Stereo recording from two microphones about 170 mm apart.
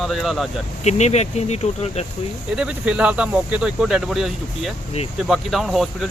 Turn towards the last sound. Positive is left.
turn(degrees=0)  # may be behind; listen again after turning